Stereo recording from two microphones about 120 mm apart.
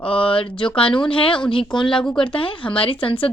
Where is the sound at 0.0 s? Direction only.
45° left (ahead or behind).